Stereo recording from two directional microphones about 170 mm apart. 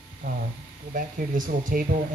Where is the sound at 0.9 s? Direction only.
55° right (ahead or behind).